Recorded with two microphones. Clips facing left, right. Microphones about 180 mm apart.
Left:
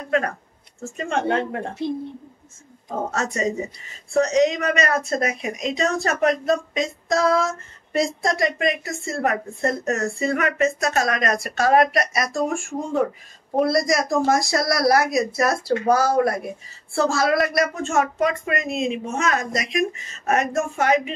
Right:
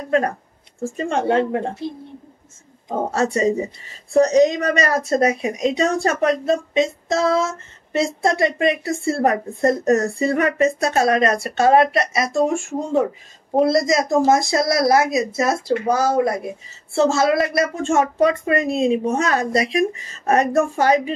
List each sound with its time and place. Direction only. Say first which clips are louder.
0.8 s speech: right 3 dB; 30° right (ahead or behind)
3.1 s speech: right 7 dB; 30° right (ahead or behind)